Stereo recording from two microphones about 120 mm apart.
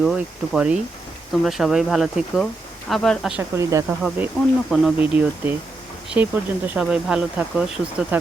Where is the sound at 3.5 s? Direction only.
25° right (ahead or behind).